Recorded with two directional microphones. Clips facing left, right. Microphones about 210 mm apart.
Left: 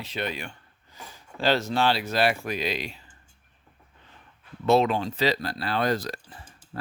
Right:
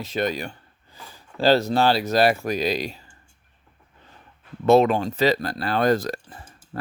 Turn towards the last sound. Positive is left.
turn(degrees=-45)  # may be behind; listen again after turning